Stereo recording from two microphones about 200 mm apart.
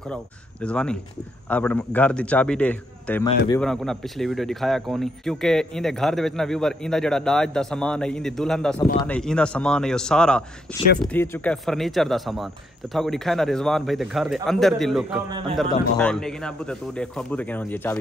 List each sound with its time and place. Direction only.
0.1 s a man's voice: 5° left (ahead or behind)
15.2 s a man's voice: 20° right (ahead or behind)
16.0 s speech: 5° left (ahead or behind)